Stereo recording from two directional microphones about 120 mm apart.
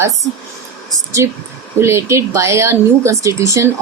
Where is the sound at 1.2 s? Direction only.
25° right (ahead or behind).